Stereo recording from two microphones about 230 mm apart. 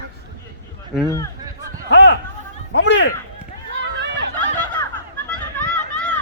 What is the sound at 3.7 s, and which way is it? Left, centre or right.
Chatter, right.